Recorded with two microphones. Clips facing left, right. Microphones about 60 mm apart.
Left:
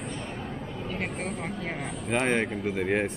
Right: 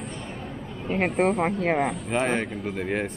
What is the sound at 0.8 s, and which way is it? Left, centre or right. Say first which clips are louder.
Speech: right 12 dB; right.